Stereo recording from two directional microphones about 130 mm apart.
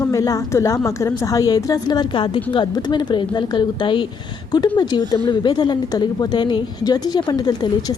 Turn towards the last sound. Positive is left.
turn(degrees=30)  # may be behind; listen again after turning